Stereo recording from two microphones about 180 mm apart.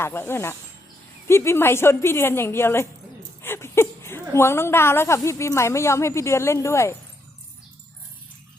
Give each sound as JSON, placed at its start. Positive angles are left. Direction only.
{"t": 0.0, "sound": "a woman's voice", "side_deg": 15}